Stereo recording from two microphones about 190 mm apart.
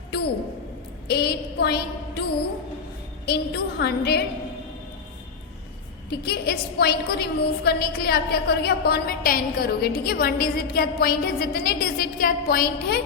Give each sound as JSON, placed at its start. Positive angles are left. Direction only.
{"t": 1.0, "sound": "a woman's voice", "side_deg": 55}
{"t": 3.2, "sound": "a woman's voice", "side_deg": 60}
{"t": 6.2, "sound": "a woman's voice", "side_deg": 55}